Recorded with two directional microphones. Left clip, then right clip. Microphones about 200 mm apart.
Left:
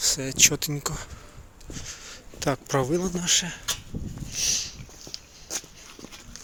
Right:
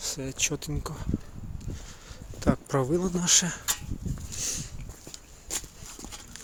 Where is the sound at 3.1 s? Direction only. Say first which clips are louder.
Right 2 dB; 35° right (ahead or behind).